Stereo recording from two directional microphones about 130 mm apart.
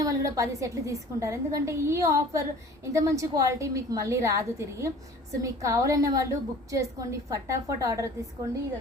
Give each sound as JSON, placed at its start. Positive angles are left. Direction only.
{"t": 0.0, "sound": "a woman's voice", "side_deg": -25}